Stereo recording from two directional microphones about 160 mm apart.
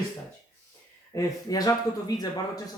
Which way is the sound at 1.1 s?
20° left (ahead or behind).